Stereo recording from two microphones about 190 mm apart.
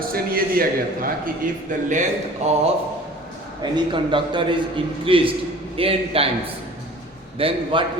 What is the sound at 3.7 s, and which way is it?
A man's voice, 25° right (ahead or behind).